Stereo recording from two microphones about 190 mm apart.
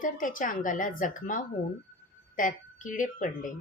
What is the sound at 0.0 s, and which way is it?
A woman's voice, 45° left (ahead or behind).